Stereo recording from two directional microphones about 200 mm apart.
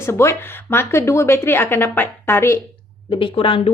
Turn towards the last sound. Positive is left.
turn(degrees=25)  # may be behind; listen again after turning